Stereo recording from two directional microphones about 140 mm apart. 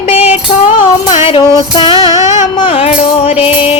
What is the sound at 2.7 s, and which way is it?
Music, 45° left (ahead or behind).